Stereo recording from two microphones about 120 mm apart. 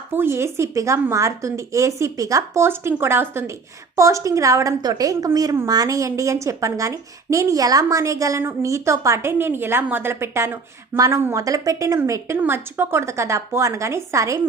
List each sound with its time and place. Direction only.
0.1 s a woman's voice: 20° right (ahead or behind)